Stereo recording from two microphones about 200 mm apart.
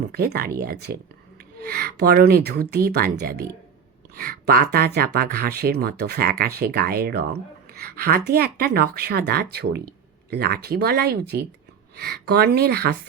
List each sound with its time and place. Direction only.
0.1 s speech: 50° right (ahead or behind)
7.7 s a sound: 50° right (ahead or behind)
8.3 s speech: 50° right (ahead or behind)